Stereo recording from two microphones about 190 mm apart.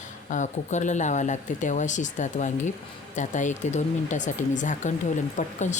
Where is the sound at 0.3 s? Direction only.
40° left (ahead or behind).